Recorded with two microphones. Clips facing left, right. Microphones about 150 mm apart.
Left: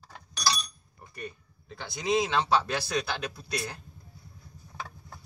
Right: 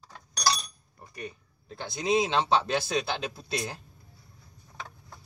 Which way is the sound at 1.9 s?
20° right (ahead or behind).